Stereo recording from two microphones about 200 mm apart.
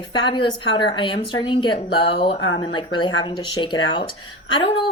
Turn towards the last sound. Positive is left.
turn(degrees=25)  # may be behind; listen again after turning